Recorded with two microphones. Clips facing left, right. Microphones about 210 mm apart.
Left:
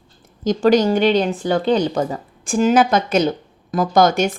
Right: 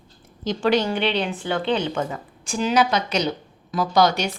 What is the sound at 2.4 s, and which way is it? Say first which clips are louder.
Speech: left 6 dB; 50° left (ahead or behind).